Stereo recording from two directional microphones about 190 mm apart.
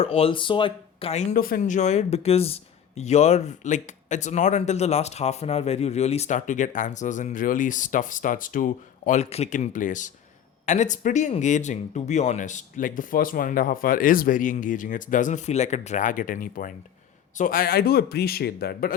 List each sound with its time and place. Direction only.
0.0 s speech: 30° left (ahead or behind)
1.3 s speech: 50° left (ahead or behind)